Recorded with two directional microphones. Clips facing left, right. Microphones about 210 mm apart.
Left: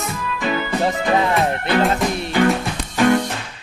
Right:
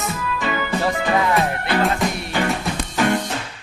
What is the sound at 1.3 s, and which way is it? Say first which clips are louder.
Speech: left 2 dB; centre (ahead or behind).